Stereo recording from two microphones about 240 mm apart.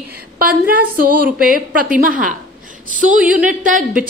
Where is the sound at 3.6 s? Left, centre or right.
Right.